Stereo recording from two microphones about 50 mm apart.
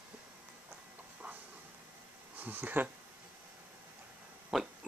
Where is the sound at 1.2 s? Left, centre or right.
Right.